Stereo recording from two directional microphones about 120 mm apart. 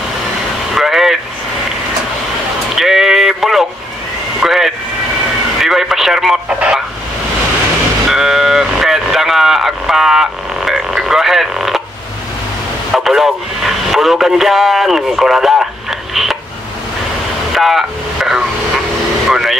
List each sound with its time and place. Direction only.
0.7 s vehicle: 5° right (ahead or behind)
2.7 s a sound: centre (ahead or behind)
4.4 s vehicle: 5° right (ahead or behind)
5.6 s radio: centre (ahead or behind)
8.1 s vehicle: 5° right (ahead or behind)
12.9 s radio: centre (ahead or behind)
17.6 s a sound: centre (ahead or behind)
19.2 s vehicle: 5° right (ahead or behind)